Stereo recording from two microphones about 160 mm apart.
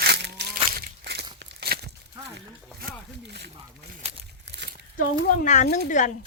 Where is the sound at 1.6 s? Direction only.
75° right (ahead or behind).